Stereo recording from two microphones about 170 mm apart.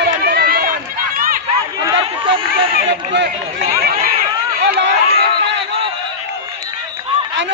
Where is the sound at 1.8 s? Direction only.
30° right (ahead or behind).